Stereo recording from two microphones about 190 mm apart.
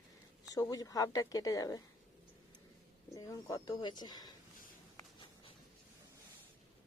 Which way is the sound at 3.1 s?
20° left (ahead or behind).